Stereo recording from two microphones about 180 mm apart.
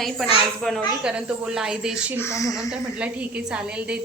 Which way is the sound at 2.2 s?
15° left (ahead or behind).